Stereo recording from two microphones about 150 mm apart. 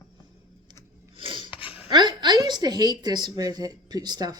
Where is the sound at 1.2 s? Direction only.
35° right (ahead or behind).